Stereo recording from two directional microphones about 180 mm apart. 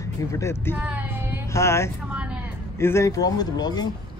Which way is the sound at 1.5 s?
15° left (ahead or behind).